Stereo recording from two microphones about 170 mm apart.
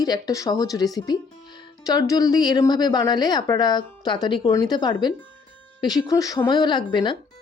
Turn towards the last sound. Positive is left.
turn(degrees=25)  # may be behind; listen again after turning